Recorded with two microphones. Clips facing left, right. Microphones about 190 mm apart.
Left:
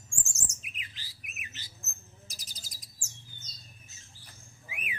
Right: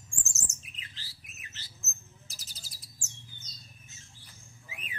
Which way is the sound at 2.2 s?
15° left (ahead or behind).